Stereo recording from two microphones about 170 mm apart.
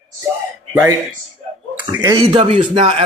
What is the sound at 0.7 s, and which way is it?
Speech, 15° right (ahead or behind).